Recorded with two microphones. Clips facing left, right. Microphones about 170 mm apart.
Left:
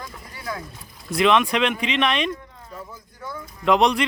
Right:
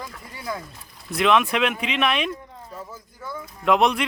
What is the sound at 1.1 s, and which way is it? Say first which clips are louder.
Speech: left 1 dB; centre (ahead or behind).